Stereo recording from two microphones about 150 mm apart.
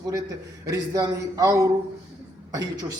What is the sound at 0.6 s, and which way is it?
A man's voice, 25° right (ahead or behind).